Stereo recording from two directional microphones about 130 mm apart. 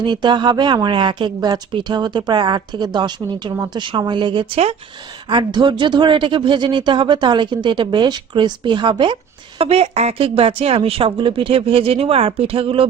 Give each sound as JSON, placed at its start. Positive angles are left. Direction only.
{"t": 0.0, "sound": "speech", "side_deg": -35}
{"t": 9.6, "sound": "a woman's voice", "side_deg": -50}